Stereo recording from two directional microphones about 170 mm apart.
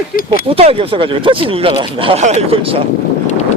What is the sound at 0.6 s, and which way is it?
Speech, 35° right (ahead or behind).